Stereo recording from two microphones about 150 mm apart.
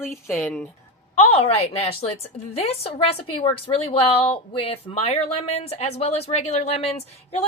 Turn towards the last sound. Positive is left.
turn(degrees=45)  # may be behind; listen again after turning